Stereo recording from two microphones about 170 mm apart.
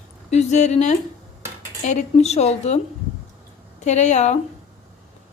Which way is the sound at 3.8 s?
45° left (ahead or behind).